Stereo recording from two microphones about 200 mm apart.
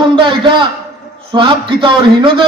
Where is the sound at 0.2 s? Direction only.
25° right (ahead or behind).